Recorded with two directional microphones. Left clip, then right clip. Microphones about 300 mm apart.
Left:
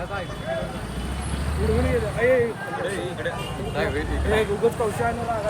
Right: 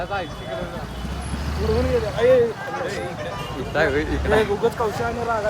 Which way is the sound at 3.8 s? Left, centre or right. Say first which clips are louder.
Right 6 dB; right.